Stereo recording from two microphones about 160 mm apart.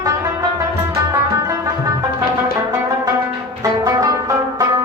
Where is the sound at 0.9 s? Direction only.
20° right (ahead or behind).